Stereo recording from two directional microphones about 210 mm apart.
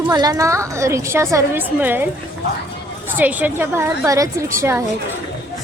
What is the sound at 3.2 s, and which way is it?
A woman's voice, 10° right (ahead or behind).